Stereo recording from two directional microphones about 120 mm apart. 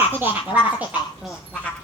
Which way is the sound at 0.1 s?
15° right (ahead or behind).